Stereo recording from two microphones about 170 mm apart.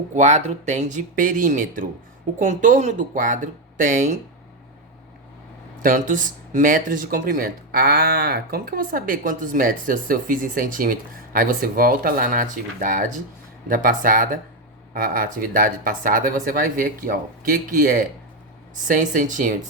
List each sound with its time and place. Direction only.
0.1 s speech: 45° right (ahead or behind)
5.8 s speech: 50° right (ahead or behind)